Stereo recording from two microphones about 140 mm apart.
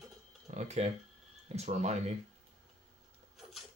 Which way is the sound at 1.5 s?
50° right (ahead or behind).